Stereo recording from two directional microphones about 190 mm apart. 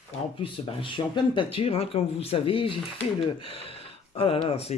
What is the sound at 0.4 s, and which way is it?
Speech, 30° left (ahead or behind).